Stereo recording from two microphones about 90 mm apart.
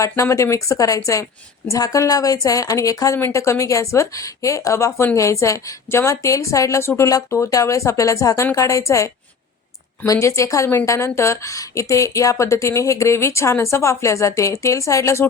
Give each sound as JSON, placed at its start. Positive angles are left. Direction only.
{"t": 0.0, "sound": "a woman's voice", "side_deg": 35}
{"t": 10.1, "sound": "a woman's voice", "side_deg": 35}